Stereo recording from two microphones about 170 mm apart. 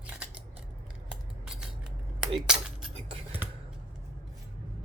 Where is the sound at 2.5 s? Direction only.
5° right (ahead or behind).